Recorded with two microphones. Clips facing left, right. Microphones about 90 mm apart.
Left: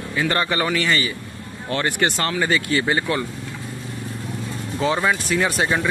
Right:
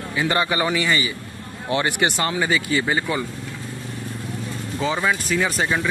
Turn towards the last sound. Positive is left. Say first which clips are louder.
# left 1 dB
turn(degrees=5)  # may be behind; listen again after turning